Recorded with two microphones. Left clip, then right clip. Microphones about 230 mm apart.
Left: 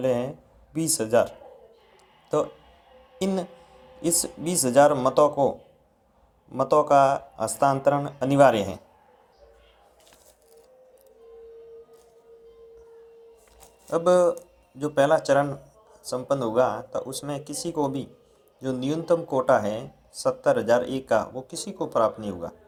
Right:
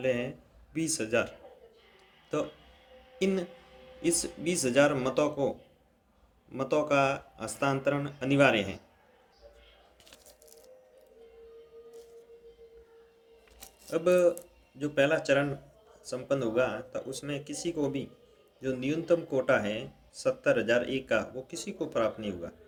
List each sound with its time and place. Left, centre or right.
0.0 s speech: centre
3.2 s speech: centre
14.0 s speech: centre